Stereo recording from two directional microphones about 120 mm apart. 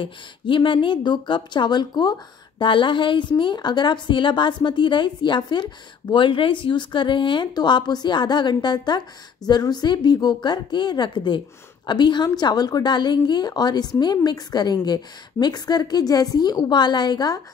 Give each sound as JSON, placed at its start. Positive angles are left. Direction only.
{"t": 0.0, "sound": "a woman's voice", "side_deg": 45}